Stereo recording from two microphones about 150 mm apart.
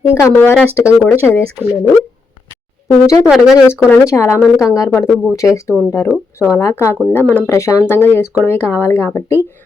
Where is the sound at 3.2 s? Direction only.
5° right (ahead or behind).